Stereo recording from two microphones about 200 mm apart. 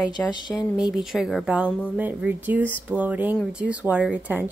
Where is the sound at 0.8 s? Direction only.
Centre (ahead or behind).